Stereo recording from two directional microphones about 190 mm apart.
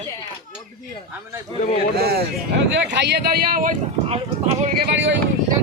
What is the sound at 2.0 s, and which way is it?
Speech, 55° right (ahead or behind).